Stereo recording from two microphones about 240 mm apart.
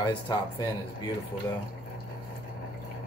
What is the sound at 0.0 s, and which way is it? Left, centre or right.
Speech, centre.